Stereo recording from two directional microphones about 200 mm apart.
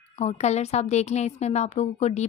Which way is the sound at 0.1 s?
35° left (ahead or behind).